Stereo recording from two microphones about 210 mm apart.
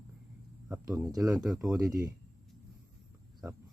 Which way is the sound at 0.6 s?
15° right (ahead or behind).